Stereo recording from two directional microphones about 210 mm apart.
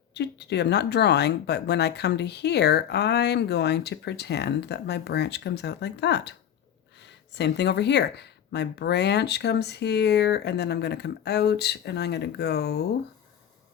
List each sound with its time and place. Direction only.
0.1 s speech: 55° left (ahead or behind)
7.3 s speech: 55° left (ahead or behind)